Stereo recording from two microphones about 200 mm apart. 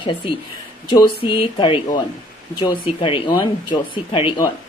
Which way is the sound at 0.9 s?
25° left (ahead or behind).